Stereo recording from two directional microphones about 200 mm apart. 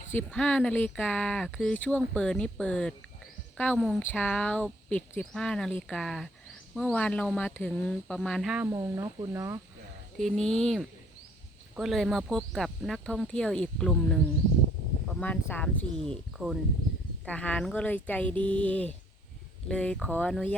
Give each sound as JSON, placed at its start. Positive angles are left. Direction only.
{"t": 0.1, "sound": "speech", "side_deg": 5}
{"t": 8.6, "sound": "speech", "side_deg": -15}
{"t": 10.2, "sound": "speech", "side_deg": 0}
{"t": 15.2, "sound": "a woman's voice", "side_deg": 10}
{"t": 16.4, "sound": "speech", "side_deg": -15}
{"t": 17.2, "sound": "a woman's voice", "side_deg": 5}